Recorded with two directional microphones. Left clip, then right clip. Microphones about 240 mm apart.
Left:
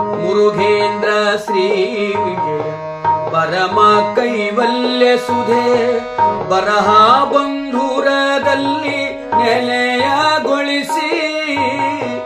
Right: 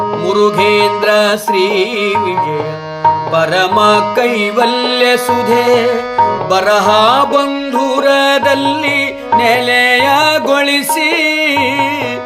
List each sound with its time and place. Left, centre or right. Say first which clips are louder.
0.3 s music: right 2 dB; right
3.3 s music: right 3 dB; right